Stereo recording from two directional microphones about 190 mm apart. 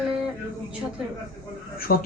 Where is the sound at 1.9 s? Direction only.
50° left (ahead or behind).